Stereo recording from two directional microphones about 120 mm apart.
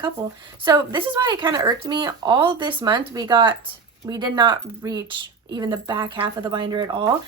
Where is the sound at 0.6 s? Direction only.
30° right (ahead or behind).